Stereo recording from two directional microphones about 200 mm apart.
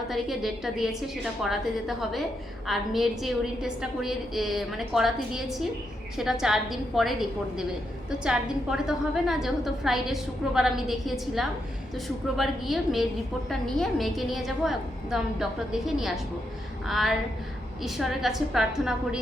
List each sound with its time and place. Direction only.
0.1 s a woman's voice: centre (ahead or behind)